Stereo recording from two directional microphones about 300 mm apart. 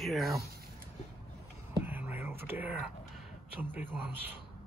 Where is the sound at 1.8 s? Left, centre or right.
Centre.